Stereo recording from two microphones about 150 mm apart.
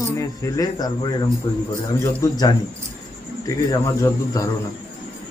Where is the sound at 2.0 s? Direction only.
25° left (ahead or behind).